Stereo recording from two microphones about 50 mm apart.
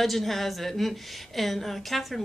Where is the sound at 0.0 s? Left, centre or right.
Centre.